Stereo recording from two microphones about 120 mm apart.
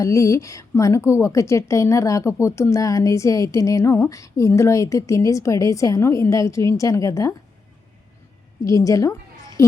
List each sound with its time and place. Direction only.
0.0 s a woman's voice: 25° left (ahead or behind)
8.6 s a woman's voice: 30° left (ahead or behind)